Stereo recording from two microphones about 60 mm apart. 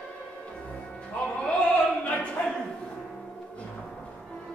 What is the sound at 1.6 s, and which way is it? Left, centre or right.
Opera, left.